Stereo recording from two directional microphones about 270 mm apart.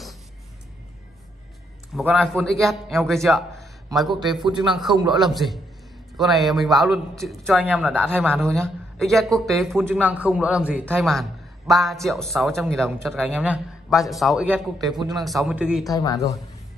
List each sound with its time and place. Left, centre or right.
2.0 s speech: centre
4.4 s a man's voice: centre
4.7 s speech: centre
15.8 s speech: centre